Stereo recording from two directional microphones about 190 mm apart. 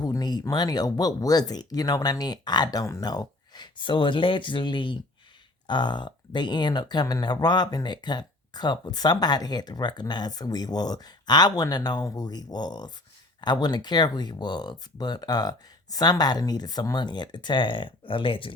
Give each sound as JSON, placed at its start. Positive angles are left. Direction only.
{"t": 0.0, "sound": "speech", "side_deg": 20}